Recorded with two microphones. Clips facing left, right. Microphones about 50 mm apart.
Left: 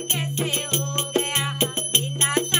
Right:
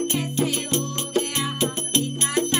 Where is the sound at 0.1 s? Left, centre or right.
Left.